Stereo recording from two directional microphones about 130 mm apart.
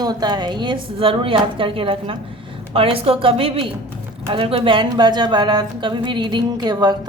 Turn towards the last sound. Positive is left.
turn(degrees=-30)  # may be behind; listen again after turning